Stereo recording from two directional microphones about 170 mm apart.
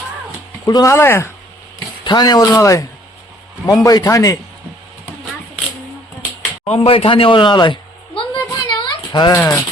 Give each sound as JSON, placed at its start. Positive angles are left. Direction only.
{"t": 0.6, "sound": "speech", "side_deg": 20}
{"t": 2.0, "sound": "speech", "side_deg": 25}
{"t": 6.7, "sound": "speech", "side_deg": 35}
{"t": 8.4, "sound": "a sound", "side_deg": 25}
{"t": 9.3, "sound": "speech", "side_deg": 15}